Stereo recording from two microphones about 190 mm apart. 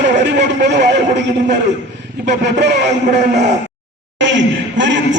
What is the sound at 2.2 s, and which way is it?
Speech, 65° right (ahead or behind).